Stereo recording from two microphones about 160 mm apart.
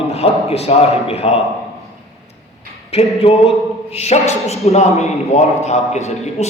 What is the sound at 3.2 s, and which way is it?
A man's voice, 40° left (ahead or behind).